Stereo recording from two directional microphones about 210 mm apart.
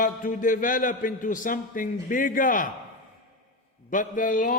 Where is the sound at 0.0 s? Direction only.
40° left (ahead or behind).